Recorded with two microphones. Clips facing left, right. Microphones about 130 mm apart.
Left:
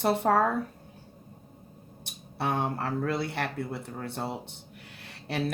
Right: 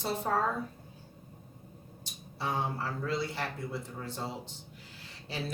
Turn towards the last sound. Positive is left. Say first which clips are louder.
# left 7 dB
turn(degrees=65)  # may be behind; listen again after turning